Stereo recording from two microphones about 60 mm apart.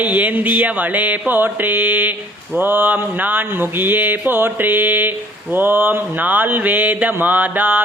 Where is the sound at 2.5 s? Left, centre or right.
Right.